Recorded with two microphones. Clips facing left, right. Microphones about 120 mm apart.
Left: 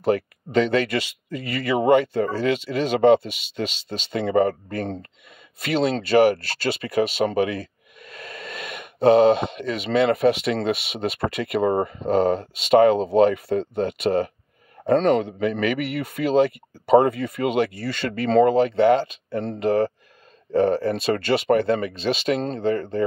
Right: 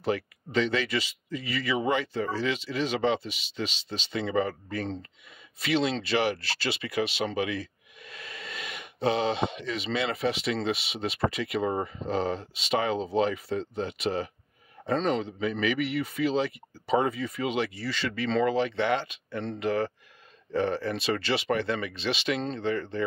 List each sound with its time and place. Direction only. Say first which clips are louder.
0.0 s a man's voice: left 7 dB; 50° left (ahead or behind)